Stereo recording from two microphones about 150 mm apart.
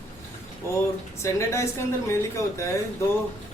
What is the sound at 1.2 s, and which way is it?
Speech, 20° left (ahead or behind).